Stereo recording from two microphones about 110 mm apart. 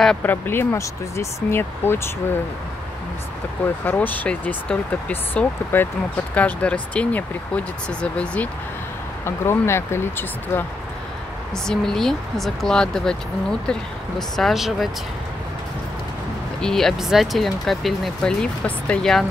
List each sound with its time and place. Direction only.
0.2 s speech: 20° left (ahead or behind)
3.6 s speech: 20° left (ahead or behind)
9.2 s speech: 25° left (ahead or behind)
11.5 s speech: 5° left (ahead or behind)
16.6 s speech: 5° left (ahead or behind)